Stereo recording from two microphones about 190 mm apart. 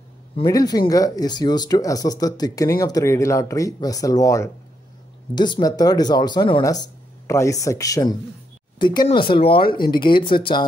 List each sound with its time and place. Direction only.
0.4 s speech: 20° left (ahead or behind)